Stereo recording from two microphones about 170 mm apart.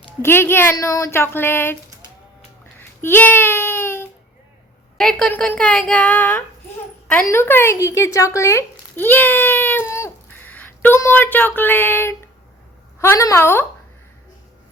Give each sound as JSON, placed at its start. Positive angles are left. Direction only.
{"t": 0.2, "sound": "speech", "side_deg": 15}
{"t": 2.7, "sound": "a sound", "side_deg": 15}
{"t": 4.9, "sound": "speech", "side_deg": 5}